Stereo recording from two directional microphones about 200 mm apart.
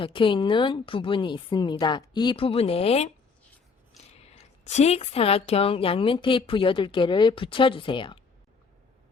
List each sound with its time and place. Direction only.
0.0 s a woman's voice: 25° left (ahead or behind)
4.7 s a woman's voice: 30° left (ahead or behind)